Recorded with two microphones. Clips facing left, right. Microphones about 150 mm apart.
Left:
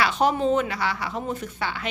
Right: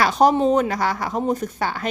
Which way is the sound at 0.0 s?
40° right (ahead or behind).